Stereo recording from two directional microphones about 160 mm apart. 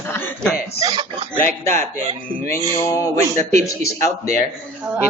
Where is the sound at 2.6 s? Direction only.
20° right (ahead or behind).